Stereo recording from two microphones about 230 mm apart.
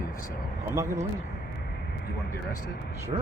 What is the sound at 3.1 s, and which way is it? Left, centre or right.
Speech, right.